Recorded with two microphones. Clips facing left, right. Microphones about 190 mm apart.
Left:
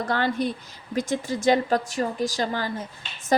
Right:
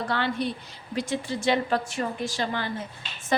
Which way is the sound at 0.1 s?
45° left (ahead or behind).